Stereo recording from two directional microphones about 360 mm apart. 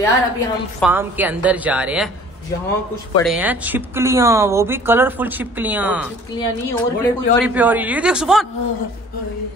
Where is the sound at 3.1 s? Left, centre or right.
Centre.